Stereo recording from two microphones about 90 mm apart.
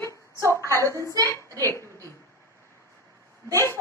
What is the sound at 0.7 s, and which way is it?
Speech, 35° left (ahead or behind).